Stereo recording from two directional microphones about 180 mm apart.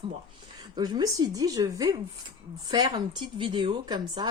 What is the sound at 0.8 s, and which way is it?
Speech, 20° right (ahead or behind).